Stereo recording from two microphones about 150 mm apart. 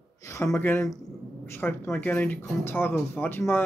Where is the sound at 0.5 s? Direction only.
15° left (ahead or behind).